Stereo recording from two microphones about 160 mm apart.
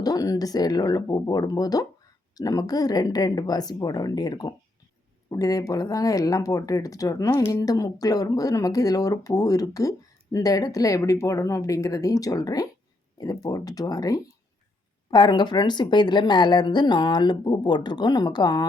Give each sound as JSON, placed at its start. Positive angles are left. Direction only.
{"t": 0.0, "sound": "speech", "side_deg": 20}